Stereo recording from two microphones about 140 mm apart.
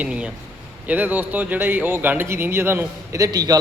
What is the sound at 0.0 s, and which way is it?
A man's voice, 10° right (ahead or behind).